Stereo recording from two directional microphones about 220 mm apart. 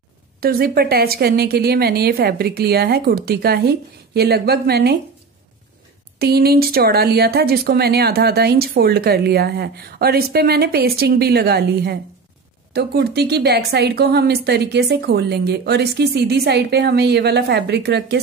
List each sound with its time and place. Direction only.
0.4 s speech: 45° right (ahead or behind)
6.1 s speech: 45° right (ahead or behind)